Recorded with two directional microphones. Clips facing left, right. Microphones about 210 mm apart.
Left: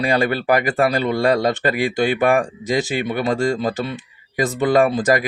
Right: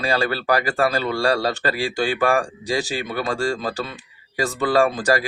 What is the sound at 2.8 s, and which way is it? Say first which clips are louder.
Speech: left 4 dB; 35° right (ahead or behind).